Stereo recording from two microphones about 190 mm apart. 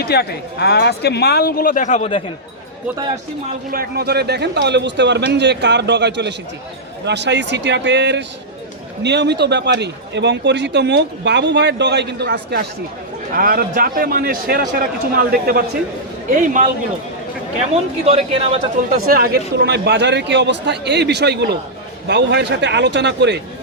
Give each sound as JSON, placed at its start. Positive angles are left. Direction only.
{"t": 0.0, "sound": "speech", "side_deg": 60}
{"t": 3.7, "sound": "a man's voice", "side_deg": -55}
{"t": 13.3, "sound": "a man's voice", "side_deg": -50}
{"t": 18.0, "sound": "a man's voice", "side_deg": -30}
{"t": 18.9, "sound": "a man's voice", "side_deg": -50}